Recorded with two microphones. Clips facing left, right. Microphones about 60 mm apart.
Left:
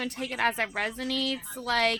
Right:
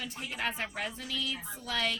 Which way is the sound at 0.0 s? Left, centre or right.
Left.